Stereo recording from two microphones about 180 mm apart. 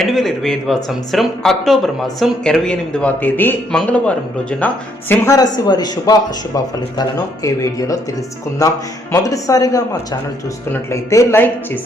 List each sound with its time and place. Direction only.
0.0 s speech: centre (ahead or behind)